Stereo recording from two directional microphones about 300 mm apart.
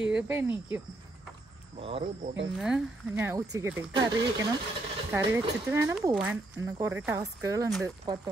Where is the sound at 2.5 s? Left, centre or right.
Centre.